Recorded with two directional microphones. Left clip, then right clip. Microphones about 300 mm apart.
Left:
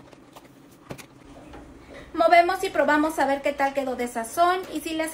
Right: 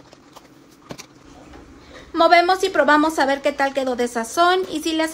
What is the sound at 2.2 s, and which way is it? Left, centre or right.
A woman's voice, right.